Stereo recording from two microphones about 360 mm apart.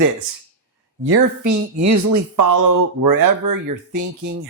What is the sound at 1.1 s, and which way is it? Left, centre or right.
Speech, right.